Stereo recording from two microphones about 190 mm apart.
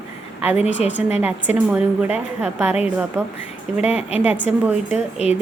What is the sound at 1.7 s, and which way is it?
A woman's voice, 5° right (ahead or behind).